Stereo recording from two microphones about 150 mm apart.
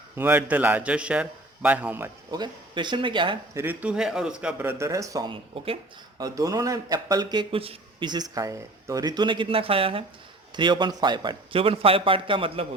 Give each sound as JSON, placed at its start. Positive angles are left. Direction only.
{"t": 0.2, "sound": "a man's voice", "side_deg": -10}
{"t": 2.3, "sound": "a man's voice", "side_deg": -30}
{"t": 3.5, "sound": "a man's voice", "side_deg": -15}
{"t": 6.1, "sound": "a man's voice", "side_deg": -25}